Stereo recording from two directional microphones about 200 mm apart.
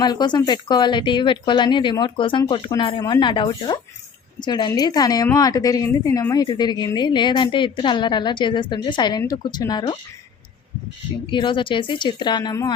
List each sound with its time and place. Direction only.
0.0 s a woman's voice: 20° left (ahead or behind)
11.3 s a woman's voice: 25° left (ahead or behind)